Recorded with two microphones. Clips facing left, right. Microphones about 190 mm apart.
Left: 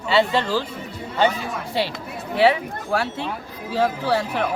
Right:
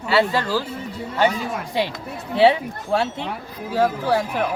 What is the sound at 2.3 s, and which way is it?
Speech, 25° right (ahead or behind).